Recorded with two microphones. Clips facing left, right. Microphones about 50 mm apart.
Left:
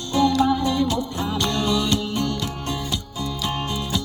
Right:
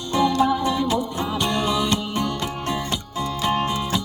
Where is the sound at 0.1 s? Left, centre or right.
Centre.